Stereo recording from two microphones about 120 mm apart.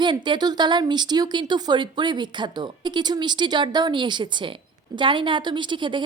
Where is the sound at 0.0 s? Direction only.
40° right (ahead or behind).